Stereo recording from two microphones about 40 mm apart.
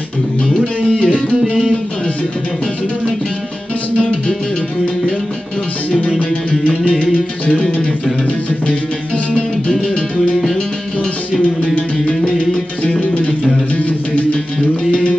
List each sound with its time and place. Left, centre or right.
0.8 s music: centre
5.9 s music: left
8.6 s music: left
11.6 s music: left
13.7 s music: left